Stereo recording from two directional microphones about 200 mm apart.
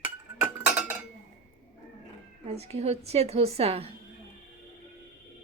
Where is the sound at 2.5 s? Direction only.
30° right (ahead or behind).